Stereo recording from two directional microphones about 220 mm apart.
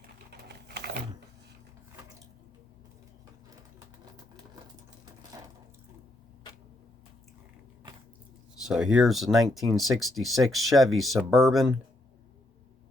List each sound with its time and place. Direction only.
0.3 s typing: 45° right (ahead or behind)
8.6 s speech: centre (ahead or behind)